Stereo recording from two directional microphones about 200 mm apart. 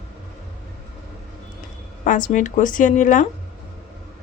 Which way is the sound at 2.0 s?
40° left (ahead or behind).